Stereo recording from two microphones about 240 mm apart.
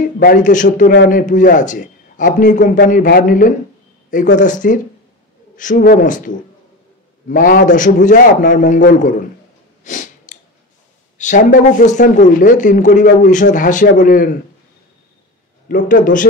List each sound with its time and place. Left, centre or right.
0.0 s speech: left
9.8 s a sound: left
11.1 s speech: left
15.7 s speech: left